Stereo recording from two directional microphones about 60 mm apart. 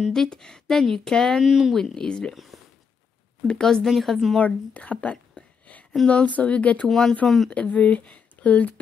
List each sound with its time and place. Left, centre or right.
0.1 s speech: centre
1.4 s speech: centre
1.8 s speech: centre
2.3 s a sound: centre
3.4 s speech: centre
4.4 s a sound: left
6.0 s speech: left
6.9 s speech: centre
7.5 s speech: left